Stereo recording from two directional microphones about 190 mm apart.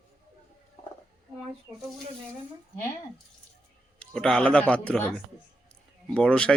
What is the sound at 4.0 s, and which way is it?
A man's voice, 5° left (ahead or behind).